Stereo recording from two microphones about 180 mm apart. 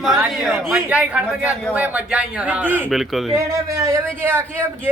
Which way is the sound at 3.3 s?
15° right (ahead or behind).